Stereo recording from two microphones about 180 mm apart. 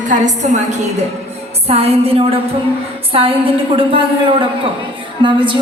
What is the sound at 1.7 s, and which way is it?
A woman's voice, 35° right (ahead or behind).